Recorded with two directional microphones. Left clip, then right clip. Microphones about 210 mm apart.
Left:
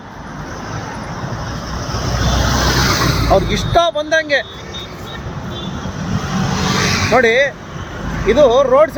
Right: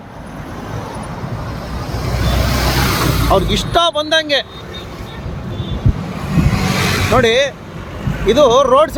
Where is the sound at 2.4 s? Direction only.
40° right (ahead or behind).